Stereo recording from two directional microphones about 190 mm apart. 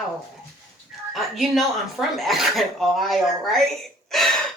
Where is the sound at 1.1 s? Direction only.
Centre (ahead or behind).